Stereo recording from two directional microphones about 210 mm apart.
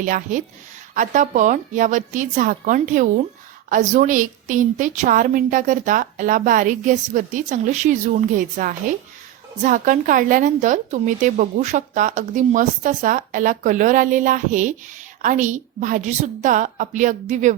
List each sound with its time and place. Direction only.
0.0 s a woman's voice: 40° right (ahead or behind)